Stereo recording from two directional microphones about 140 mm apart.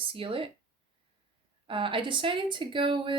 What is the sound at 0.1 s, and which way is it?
Speech, 40° right (ahead or behind).